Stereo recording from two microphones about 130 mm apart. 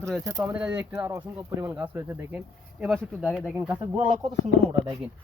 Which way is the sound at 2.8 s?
5° right (ahead or behind).